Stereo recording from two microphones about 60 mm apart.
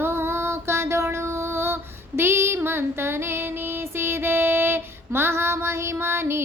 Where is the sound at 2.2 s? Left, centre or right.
Right.